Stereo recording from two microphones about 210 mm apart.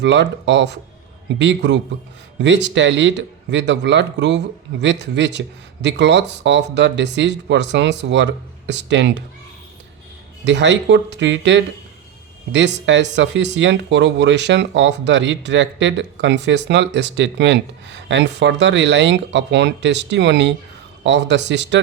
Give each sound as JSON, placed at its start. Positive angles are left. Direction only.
{"t": 0.0, "sound": "speech", "side_deg": -55}
{"t": 10.4, "sound": "speech", "side_deg": -60}